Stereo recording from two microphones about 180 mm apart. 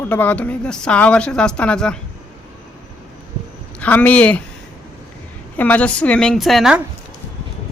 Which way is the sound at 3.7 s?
10° left (ahead or behind).